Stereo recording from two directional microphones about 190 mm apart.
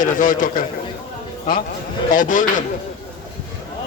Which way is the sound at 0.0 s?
45° left (ahead or behind).